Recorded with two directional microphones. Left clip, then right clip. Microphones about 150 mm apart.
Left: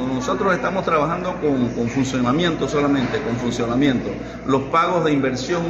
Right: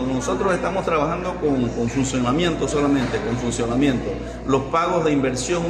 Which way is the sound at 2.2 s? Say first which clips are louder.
Left 1 dB; 10° right (ahead or behind).